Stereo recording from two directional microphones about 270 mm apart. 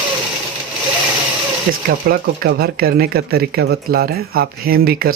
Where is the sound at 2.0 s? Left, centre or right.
Right.